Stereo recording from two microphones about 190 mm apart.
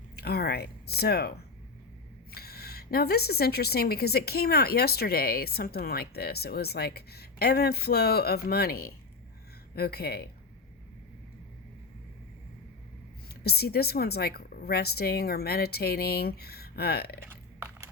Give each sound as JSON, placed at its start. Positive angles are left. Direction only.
{"t": 0.2, "sound": "speech", "side_deg": 60}
{"t": 2.3, "sound": "a woman's voice", "side_deg": 55}
{"t": 13.2, "sound": "a woman's voice", "side_deg": 55}